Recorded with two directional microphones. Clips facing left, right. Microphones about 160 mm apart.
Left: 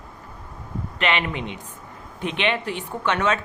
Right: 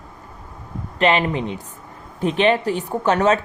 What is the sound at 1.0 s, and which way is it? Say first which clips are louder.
Speech: right 6 dB; 35° right (ahead or behind).